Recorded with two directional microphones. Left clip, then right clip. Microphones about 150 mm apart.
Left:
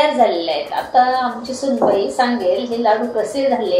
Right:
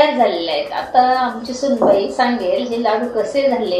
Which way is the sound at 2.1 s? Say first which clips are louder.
Even; 15° left (ahead or behind).